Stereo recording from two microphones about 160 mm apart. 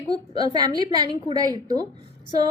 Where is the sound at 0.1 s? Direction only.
25° right (ahead or behind).